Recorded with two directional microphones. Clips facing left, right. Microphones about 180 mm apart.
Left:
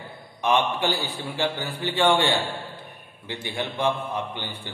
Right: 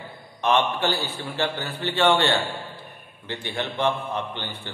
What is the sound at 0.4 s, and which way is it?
A man's voice, 15° left (ahead or behind).